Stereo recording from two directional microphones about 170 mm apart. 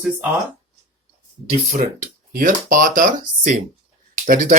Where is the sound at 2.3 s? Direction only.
50° right (ahead or behind).